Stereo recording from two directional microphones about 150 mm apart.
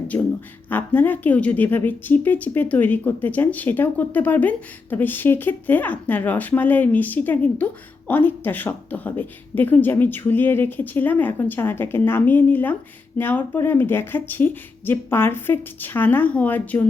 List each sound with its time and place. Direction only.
0.1 s speech: 15° left (ahead or behind)